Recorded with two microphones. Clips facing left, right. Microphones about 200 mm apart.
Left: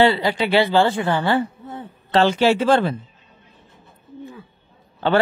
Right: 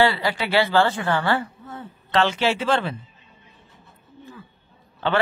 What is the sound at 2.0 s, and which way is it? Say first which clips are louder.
Speech: left 5 dB; 35° left (ahead or behind).